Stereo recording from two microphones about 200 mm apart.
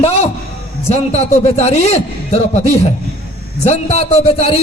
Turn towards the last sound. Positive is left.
turn(degrees=30)  # may be behind; listen again after turning